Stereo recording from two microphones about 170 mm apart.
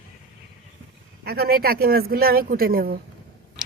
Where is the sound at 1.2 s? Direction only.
65° right (ahead or behind).